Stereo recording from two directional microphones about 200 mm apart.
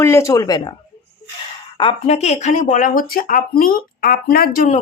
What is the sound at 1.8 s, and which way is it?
Speech, 30° left (ahead or behind).